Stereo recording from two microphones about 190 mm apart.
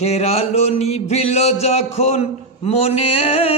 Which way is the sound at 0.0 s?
35° left (ahead or behind).